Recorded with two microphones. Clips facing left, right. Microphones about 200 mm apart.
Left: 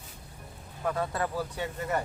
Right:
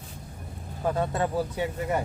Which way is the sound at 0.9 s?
25° right (ahead or behind).